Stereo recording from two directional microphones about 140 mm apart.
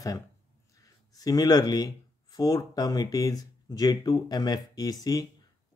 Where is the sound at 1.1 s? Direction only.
25° left (ahead or behind).